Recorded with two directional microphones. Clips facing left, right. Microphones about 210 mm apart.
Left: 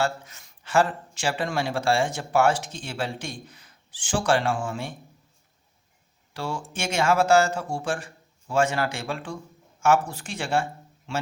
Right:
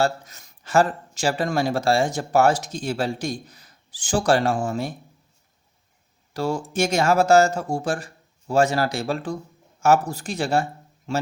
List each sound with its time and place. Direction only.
0.0 s speech: 40° right (ahead or behind)
6.3 s speech: 40° right (ahead or behind)